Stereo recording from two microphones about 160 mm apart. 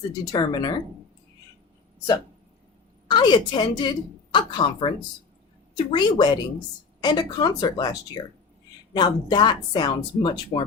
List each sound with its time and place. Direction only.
0.1 s a woman's voice: 25° left (ahead or behind)
3.1 s a woman's voice: 25° left (ahead or behind)